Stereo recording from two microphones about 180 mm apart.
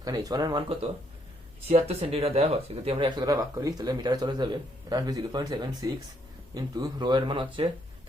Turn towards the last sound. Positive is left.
turn(degrees=-30)  # may be behind; listen again after turning